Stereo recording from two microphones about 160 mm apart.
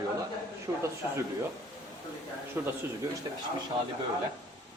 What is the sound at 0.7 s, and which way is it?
Speech, 15° right (ahead or behind).